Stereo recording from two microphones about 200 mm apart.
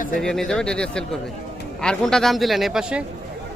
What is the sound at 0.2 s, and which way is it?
Speech, centre (ahead or behind).